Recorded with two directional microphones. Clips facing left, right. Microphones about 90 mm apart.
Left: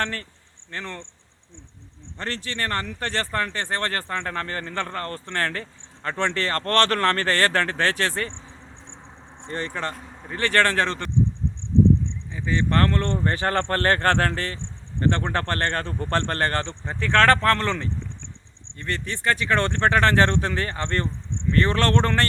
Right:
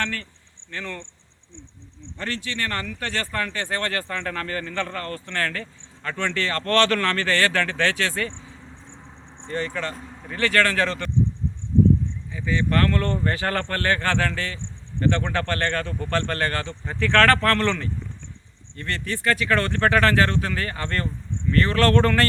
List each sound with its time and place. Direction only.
0.0 s speech: 35° left (ahead or behind)
2.1 s speech: 35° left (ahead or behind)
9.5 s speech: 30° left (ahead or behind)
12.6 s speech: 30° left (ahead or behind)